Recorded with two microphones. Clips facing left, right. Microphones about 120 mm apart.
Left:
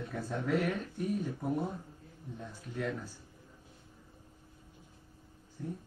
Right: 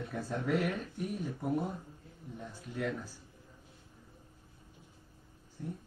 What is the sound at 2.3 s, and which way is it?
Speech, 10° right (ahead or behind).